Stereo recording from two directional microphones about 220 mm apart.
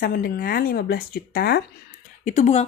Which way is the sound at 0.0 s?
40° left (ahead or behind).